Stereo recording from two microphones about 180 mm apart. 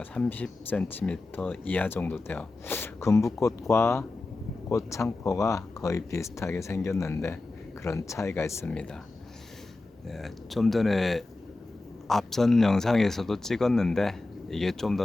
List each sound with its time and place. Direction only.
0.0 s speech: 5° left (ahead or behind)
10.1 s speech: centre (ahead or behind)